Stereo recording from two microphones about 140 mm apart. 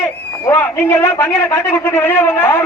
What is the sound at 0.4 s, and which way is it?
A man's voice, 15° left (ahead or behind).